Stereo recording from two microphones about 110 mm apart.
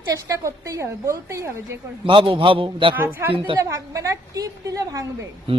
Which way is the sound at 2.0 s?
55° right (ahead or behind).